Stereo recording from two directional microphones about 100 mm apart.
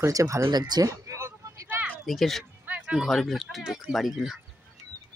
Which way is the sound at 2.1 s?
Centre (ahead or behind).